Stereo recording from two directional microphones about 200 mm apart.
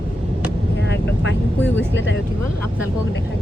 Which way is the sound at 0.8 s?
60° left (ahead or behind).